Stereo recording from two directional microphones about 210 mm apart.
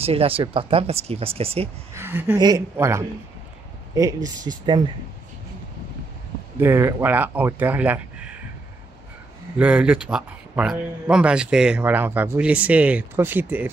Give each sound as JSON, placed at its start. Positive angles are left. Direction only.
{"t": 0.0, "sound": "speech", "side_deg": -25}
{"t": 2.0, "sound": "speech", "side_deg": -10}
{"t": 4.2, "sound": "speech", "side_deg": -40}
{"t": 4.6, "sound": "speech", "side_deg": -20}
{"t": 6.6, "sound": "speech", "side_deg": -10}
{"t": 9.6, "sound": "speech", "side_deg": -5}